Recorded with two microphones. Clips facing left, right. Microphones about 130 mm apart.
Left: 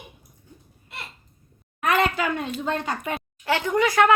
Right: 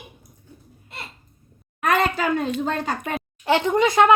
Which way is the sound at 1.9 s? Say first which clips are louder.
Right 2 dB; 40° right (ahead or behind).